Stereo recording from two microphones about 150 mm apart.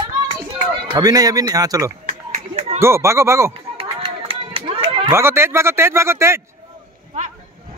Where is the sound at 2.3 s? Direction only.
45° right (ahead or behind).